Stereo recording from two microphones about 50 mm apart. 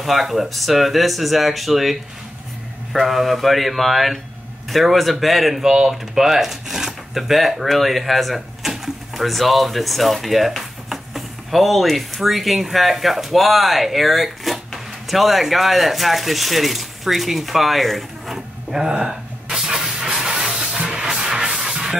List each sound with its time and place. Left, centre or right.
0.0 s speech: centre
20.2 s steam: centre
20.8 s music: centre
21.1 s a sound: centre